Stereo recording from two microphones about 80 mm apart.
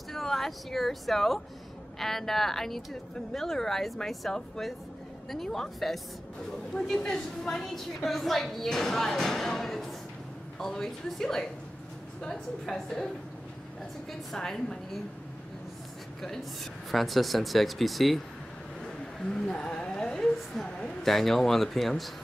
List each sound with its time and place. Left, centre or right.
0.1 s a woman's voice: centre
14.3 s a woman's voice: centre
16.9 s a woman's voice: centre